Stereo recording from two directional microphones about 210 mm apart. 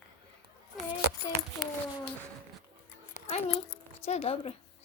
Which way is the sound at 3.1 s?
30° left (ahead or behind).